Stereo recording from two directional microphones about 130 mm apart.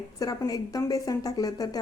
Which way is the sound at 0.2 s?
30° left (ahead or behind).